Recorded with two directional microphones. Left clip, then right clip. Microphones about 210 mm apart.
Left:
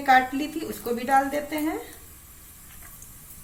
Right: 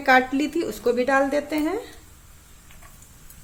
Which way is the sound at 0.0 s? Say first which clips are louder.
Right 1 dB; 50° right (ahead or behind).